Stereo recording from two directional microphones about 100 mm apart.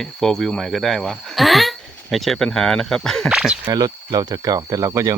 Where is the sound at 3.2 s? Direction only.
5° right (ahead or behind).